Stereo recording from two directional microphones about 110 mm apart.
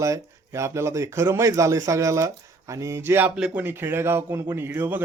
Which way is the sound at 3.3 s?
10° right (ahead or behind).